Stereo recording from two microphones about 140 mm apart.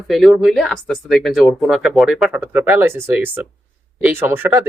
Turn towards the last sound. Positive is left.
turn(degrees=-15)  # may be behind; listen again after turning